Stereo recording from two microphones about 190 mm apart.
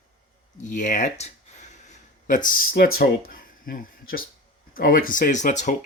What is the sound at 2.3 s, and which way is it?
Speech, 45° left (ahead or behind).